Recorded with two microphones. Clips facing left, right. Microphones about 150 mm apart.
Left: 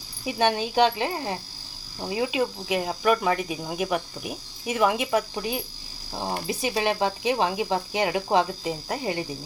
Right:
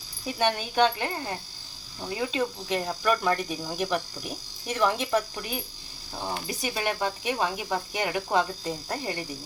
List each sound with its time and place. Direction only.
0.3 s speech: 20° left (ahead or behind)
2.0 s cricket: 20° left (ahead or behind)
5.3 s speech: 25° left (ahead or behind)
8.6 s cricket: 10° left (ahead or behind)